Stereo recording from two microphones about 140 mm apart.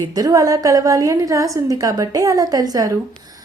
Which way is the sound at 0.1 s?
25° right (ahead or behind).